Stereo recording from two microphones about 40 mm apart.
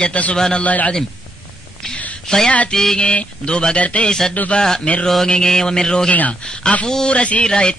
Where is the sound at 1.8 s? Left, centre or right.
Centre.